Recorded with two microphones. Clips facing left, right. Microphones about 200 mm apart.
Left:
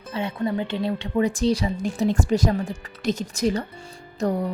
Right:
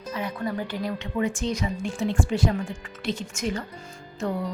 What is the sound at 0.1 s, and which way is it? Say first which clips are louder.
A woman's voice: left 4 dB; 30° left (ahead or behind).